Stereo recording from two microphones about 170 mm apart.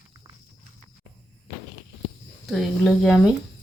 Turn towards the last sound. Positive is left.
turn(degrees=0)  # may be behind; listen again after turning